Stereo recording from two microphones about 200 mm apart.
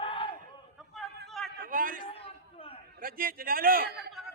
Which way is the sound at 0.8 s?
Centre (ahead or behind).